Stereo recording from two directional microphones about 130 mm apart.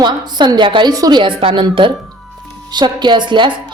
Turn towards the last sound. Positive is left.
turn(degrees=-40)  # may be behind; listen again after turning